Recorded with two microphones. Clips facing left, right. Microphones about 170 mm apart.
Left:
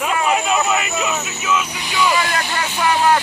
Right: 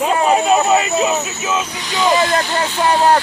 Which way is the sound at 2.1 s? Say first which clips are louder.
Right 5 dB; 20° right (ahead or behind).